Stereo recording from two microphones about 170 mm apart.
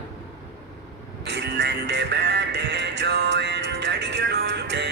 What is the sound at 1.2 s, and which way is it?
Music, 85° right.